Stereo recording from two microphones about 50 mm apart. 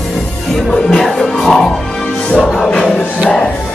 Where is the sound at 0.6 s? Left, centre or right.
Centre.